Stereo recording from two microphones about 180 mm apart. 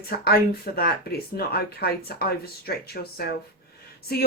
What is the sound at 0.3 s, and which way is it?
Speech, 60° left (ahead or behind).